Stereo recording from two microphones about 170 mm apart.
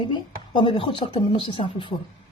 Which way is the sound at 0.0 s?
25° left (ahead or behind).